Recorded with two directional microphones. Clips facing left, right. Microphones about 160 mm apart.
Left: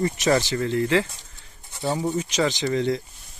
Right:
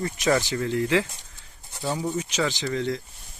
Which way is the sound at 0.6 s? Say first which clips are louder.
Even; 10° right (ahead or behind).